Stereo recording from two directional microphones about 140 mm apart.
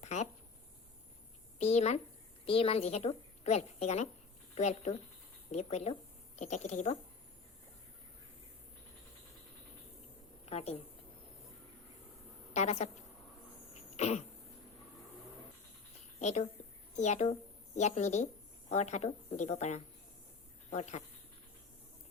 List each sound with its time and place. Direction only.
0.0 s a sound: 55° left (ahead or behind)
1.5 s a woman's voice: 50° left (ahead or behind)
10.4 s a woman's voice: 50° left (ahead or behind)
12.5 s a woman's voice: 55° left (ahead or behind)
13.9 s throat clearing: 55° left (ahead or behind)
16.9 s a woman's voice: 55° left (ahead or behind)